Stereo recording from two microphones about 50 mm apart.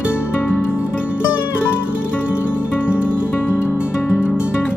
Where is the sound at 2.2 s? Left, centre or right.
Left.